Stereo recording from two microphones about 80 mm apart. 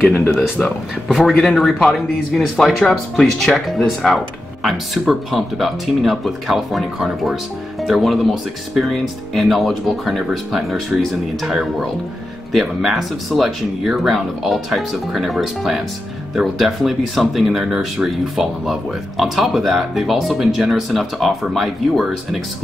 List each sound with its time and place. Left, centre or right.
0.3 s speech: centre